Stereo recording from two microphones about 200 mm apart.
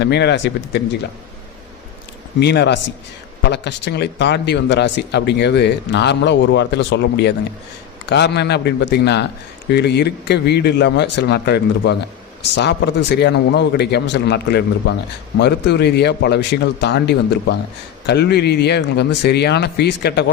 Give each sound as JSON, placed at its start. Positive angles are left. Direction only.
{"t": 0.0, "sound": "speech", "side_deg": 60}
{"t": 2.4, "sound": "speech", "side_deg": 55}